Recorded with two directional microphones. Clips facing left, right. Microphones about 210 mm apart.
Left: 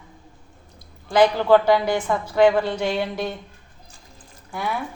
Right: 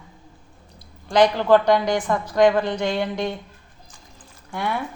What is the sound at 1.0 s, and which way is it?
A woman's voice, 5° left (ahead or behind).